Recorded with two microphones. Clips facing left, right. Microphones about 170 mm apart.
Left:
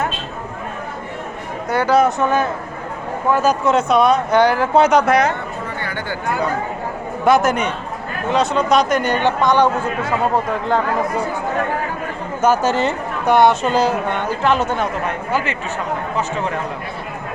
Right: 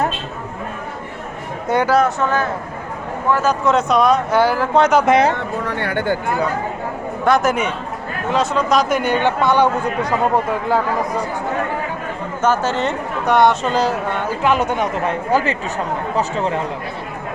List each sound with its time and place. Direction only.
1.7 s speech: 20° right (ahead or behind)
2.0 s speech: 15° left (ahead or behind)
3.7 s speech: centre (ahead or behind)
5.0 s speech: 25° right (ahead or behind)
5.6 s speech: 70° right (ahead or behind)
7.3 s speech: centre (ahead or behind)
12.4 s speech: 10° left (ahead or behind); by 14.8 s 15° right (ahead or behind)
15.0 s speech: 40° right (ahead or behind)